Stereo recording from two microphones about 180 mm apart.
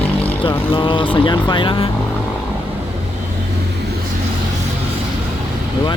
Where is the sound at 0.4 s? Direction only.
25° left (ahead or behind).